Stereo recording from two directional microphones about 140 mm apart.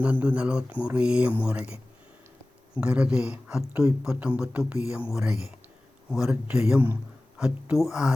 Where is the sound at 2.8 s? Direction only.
5° right (ahead or behind).